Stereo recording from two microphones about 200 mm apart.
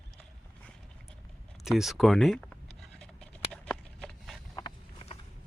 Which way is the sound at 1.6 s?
Centre (ahead or behind).